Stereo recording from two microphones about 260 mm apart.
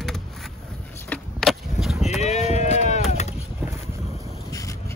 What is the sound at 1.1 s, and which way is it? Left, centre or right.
Skateboard, centre.